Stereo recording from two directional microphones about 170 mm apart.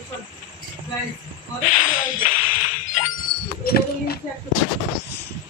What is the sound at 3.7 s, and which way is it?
Speech, 65° left (ahead or behind).